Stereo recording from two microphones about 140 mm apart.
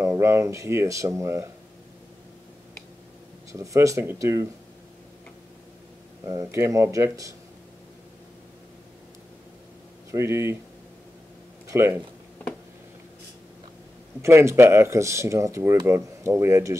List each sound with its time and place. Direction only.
0.0 s speech: 20° right (ahead or behind)
3.5 s speech: 20° right (ahead or behind)
6.2 s speech: 25° right (ahead or behind)
10.1 s speech: 20° right (ahead or behind)
11.6 s speech: 20° right (ahead or behind)
14.2 s speech: 20° right (ahead or behind)